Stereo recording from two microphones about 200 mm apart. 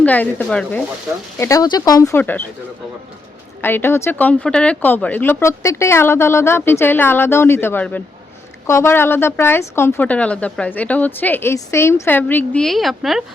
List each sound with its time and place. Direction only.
0.0 s a woman's voice: 10° left (ahead or behind)
3.6 s a woman's voice: 10° left (ahead or behind)